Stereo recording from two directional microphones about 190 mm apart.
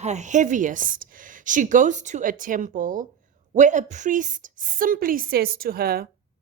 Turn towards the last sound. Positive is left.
turn(degrees=-55)  # may be behind; listen again after turning